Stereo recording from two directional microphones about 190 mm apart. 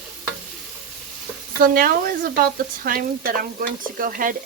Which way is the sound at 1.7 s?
50° right (ahead or behind).